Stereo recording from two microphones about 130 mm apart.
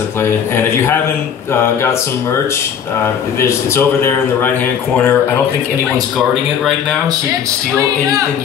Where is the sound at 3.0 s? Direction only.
20° left (ahead or behind).